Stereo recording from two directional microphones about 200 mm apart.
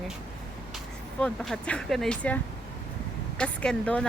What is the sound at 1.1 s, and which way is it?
Speech, 5° left (ahead or behind).